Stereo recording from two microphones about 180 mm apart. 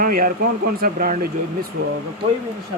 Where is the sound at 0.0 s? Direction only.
50° right (ahead or behind).